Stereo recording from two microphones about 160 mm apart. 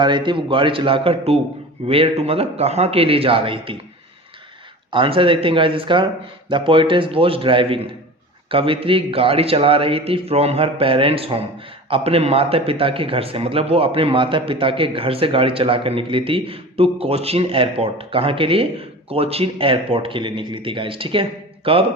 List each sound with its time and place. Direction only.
0.0 s speech: 30° right (ahead or behind)
4.9 s speech: 35° right (ahead or behind)